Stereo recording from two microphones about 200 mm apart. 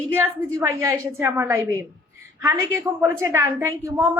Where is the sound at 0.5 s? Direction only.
15° right (ahead or behind).